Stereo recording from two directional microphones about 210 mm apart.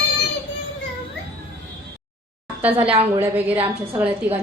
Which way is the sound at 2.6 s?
10° right (ahead or behind).